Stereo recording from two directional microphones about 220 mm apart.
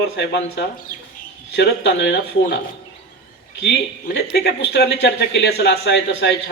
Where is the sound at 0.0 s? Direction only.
50° left (ahead or behind).